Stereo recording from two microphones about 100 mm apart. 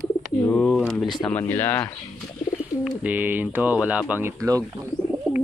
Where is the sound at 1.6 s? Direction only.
20° left (ahead or behind).